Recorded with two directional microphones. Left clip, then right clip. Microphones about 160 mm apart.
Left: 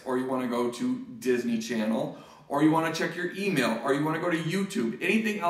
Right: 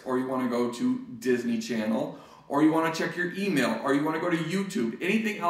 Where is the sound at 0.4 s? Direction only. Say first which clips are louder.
Right 1 dB; 25° left (ahead or behind).